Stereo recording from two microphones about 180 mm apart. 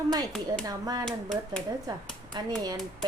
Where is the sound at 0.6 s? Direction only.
20° right (ahead or behind).